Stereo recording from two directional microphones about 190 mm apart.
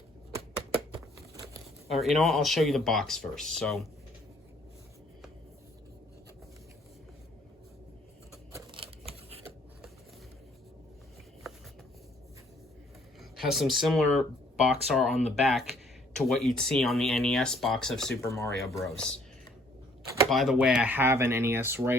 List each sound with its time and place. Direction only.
1.9 s speech: centre (ahead or behind)
8.7 s a sound: 30° right (ahead or behind)
13.3 s speech: centre (ahead or behind)
20.3 s speech: centre (ahead or behind)